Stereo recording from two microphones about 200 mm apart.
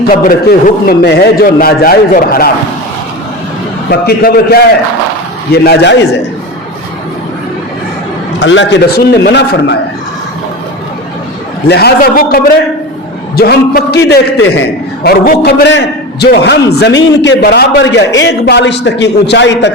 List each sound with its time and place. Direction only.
0.1 s a man's voice: 45° left (ahead or behind)
3.8 s a man's voice: 50° left (ahead or behind)
5.6 s a man's voice: 60° left (ahead or behind)
8.4 s a man's voice: 65° left (ahead or behind)
11.7 s a man's voice: 55° left (ahead or behind)